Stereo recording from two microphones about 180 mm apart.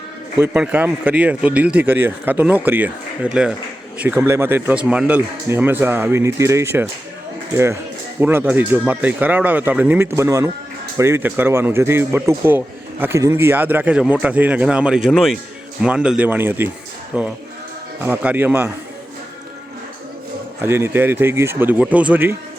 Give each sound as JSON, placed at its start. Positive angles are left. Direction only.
{"t": 0.3, "sound": "speech", "side_deg": -10}
{"t": 20.6, "sound": "speech", "side_deg": -15}